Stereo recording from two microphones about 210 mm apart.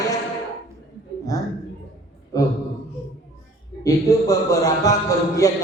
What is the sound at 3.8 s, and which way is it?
Mantra, 15° left (ahead or behind).